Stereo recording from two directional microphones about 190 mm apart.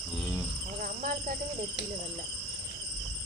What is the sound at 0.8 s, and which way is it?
Cricket, 45° right (ahead or behind).